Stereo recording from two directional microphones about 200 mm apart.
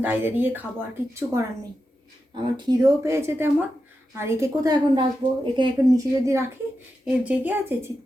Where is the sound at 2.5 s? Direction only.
20° right (ahead or behind).